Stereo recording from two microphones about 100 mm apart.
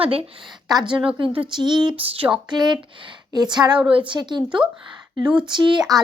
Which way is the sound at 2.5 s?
45° right (ahead or behind).